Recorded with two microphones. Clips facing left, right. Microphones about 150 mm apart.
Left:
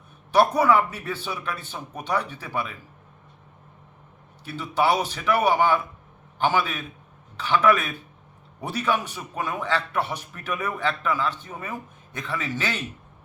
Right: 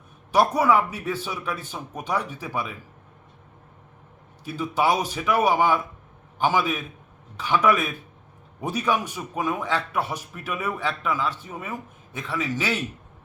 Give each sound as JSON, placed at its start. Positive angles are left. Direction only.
{"t": 0.3, "sound": "a man's voice", "side_deg": -10}
{"t": 4.4, "sound": "a man's voice", "side_deg": -10}